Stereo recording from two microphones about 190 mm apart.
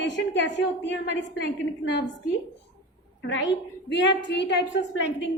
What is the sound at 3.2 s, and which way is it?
A woman's voice, 70° left (ahead or behind).